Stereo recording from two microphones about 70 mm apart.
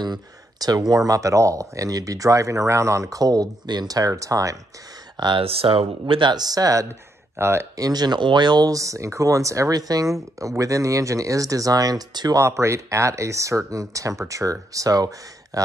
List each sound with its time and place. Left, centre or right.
0.0 s speech: right
5.2 s speech: right
7.3 s speech: right
7.7 s speech: right
8.7 s speech: right
12.4 s speech: right